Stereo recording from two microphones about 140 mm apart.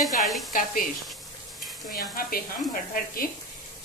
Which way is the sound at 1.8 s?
90° left.